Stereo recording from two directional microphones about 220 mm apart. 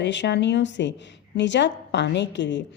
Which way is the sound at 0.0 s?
55° left (ahead or behind).